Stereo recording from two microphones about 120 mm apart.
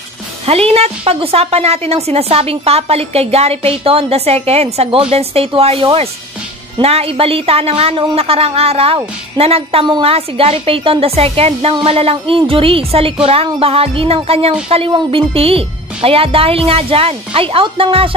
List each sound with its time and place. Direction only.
0.5 s speech: 55° right (ahead or behind)